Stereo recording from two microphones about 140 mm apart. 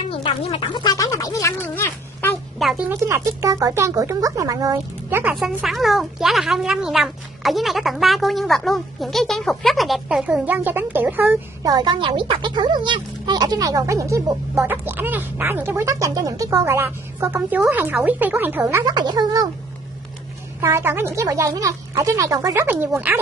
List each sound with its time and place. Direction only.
0.1 s a sound: 40° left (ahead or behind); by 2.3 s 15° left (ahead or behind)
2.6 s speech: centre (ahead or behind)
2.9 s speech: 20° right (ahead or behind)
5.3 s speech: centre (ahead or behind)
11.6 s speech: 30° right (ahead or behind)
18.9 s speech: 30° right (ahead or behind)
20.6 s speech: 20° right (ahead or behind)